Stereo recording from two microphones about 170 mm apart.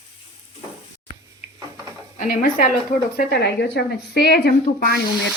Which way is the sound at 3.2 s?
70° left (ahead or behind).